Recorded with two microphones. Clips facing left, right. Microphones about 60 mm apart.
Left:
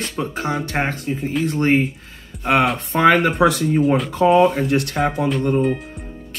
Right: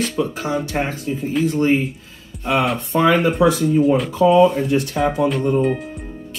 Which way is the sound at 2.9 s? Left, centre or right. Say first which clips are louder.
Left 1 dB; left.